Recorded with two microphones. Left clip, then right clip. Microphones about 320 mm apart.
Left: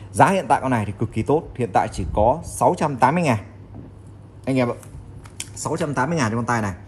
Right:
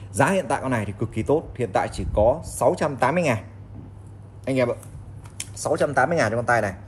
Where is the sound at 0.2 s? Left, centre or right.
Left.